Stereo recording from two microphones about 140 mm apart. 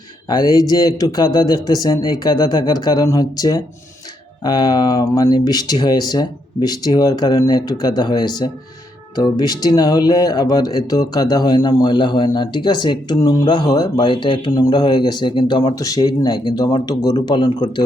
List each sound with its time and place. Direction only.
0.3 s speech: 30° left (ahead or behind)